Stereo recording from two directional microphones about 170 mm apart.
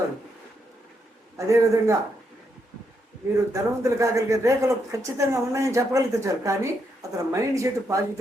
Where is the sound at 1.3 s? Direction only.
20° right (ahead or behind).